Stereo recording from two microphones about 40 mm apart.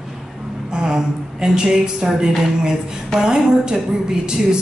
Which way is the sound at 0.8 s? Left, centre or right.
Centre.